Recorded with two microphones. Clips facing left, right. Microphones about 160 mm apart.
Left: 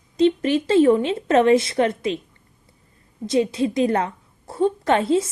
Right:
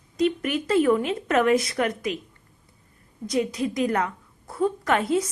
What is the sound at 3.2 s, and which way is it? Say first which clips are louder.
A woman's voice: left 5 dB; 25° left (ahead or behind).